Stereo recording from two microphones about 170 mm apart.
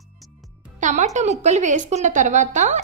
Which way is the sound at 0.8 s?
45° right (ahead or behind).